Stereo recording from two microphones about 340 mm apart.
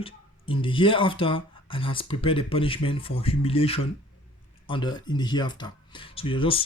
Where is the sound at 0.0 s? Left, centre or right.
Centre.